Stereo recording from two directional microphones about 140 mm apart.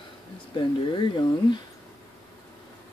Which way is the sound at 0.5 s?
35° left (ahead or behind).